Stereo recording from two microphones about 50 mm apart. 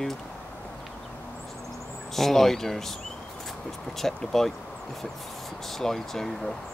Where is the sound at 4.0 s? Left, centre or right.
Centre.